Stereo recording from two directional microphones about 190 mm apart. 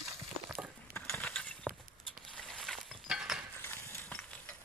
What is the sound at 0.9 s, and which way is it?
Mechanisms, 5° left (ahead or behind).